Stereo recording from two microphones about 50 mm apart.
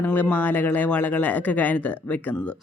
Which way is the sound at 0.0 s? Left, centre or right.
Left.